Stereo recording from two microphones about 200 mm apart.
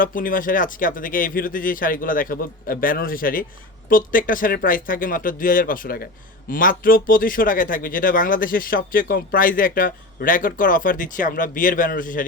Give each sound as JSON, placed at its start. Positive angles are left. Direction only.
{"t": 0.0, "sound": "a man's voice", "side_deg": 45}